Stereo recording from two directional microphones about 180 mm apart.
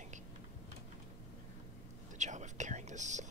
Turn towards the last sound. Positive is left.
turn(degrees=-40)  # may be behind; listen again after turning